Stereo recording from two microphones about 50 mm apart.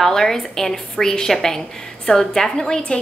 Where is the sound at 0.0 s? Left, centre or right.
Centre.